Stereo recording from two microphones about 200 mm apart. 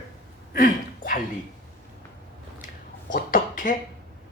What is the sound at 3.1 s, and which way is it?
Speech, 45° left (ahead or behind).